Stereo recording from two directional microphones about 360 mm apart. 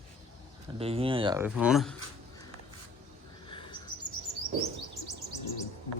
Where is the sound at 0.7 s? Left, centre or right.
Centre.